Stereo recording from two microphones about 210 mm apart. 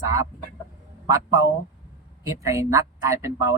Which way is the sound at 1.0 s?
15° right (ahead or behind).